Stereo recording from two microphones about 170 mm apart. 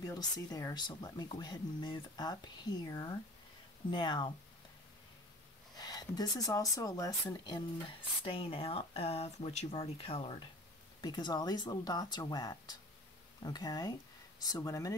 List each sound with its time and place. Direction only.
0.0 s speech: 20° left (ahead or behind)
5.8 s speech: 20° left (ahead or behind)
8.2 s speech: 35° left (ahead or behind)